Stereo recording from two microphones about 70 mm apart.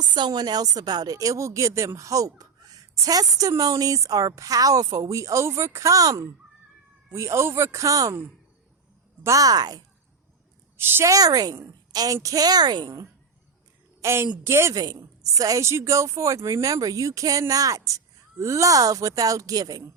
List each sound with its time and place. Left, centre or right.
0.1 s speech: right
2.4 s a sound: right
3.6 s speech: right
7.1 s speech: right
7.9 s speech: right
9.2 s speech: right
10.8 s a woman's voice: right
11.0 s a woman's voice: right
14.0 s a woman's voice: right
14.9 s a woman's voice: right
15.6 s speech: right